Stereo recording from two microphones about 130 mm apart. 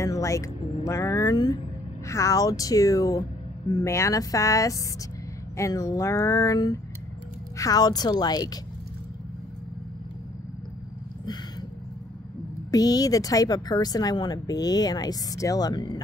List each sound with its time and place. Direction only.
0.0 s a woman's voice: 25° left (ahead or behind)
12.7 s a woman's voice: 30° left (ahead or behind)